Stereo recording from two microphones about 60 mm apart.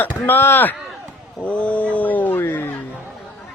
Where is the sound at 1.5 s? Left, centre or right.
Left.